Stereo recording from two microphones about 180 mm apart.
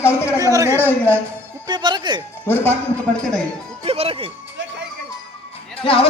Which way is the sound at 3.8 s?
35° right (ahead or behind).